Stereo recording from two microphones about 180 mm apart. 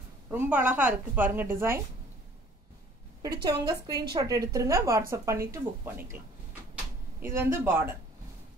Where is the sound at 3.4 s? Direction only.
20° right (ahead or behind).